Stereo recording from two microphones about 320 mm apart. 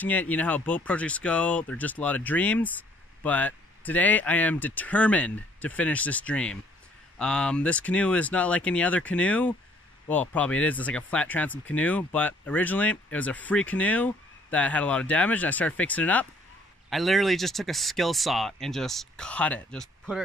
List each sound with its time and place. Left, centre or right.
0.0 s speech: centre